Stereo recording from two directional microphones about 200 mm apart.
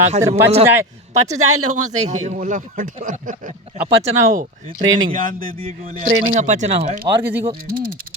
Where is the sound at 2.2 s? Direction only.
40° right (ahead or behind).